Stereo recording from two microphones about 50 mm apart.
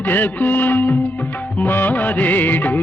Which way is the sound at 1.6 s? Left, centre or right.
Left.